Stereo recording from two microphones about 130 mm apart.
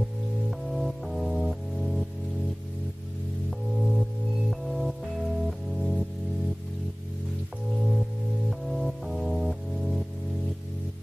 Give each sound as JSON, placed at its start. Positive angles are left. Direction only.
{"t": 0.7, "sound": "music", "side_deg": 0}
{"t": 3.4, "sound": "music", "side_deg": 0}
{"t": 8.5, "sound": "music", "side_deg": 0}